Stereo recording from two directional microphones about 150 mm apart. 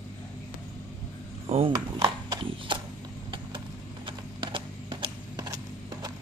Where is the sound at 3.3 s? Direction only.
35° right (ahead or behind).